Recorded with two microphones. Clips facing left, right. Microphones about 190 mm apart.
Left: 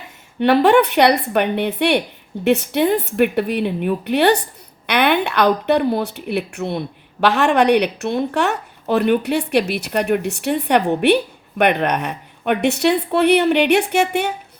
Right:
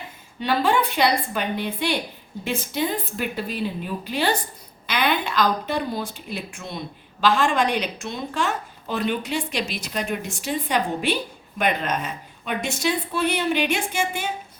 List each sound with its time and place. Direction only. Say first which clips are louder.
0.3 s a woman's voice: left 9 dB; 65° left (ahead or behind)